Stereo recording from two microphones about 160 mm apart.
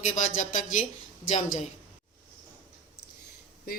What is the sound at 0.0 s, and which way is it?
Speech, 50° left (ahead or behind).